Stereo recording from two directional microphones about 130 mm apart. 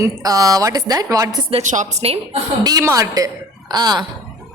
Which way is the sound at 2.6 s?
25° right (ahead or behind).